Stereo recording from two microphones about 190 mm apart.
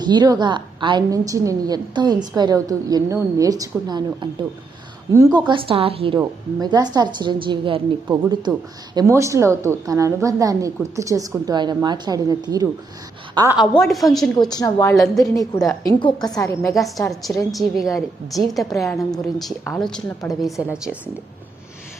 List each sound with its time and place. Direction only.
0.0 s a woman's voice: 20° right (ahead or behind)
13.6 s a woman's voice: centre (ahead or behind)
14.5 s a woman's voice: 15° left (ahead or behind)
17.1 s a woman's voice: centre (ahead or behind)